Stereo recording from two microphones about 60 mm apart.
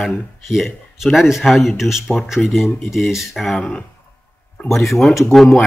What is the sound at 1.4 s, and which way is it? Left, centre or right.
Speech, centre.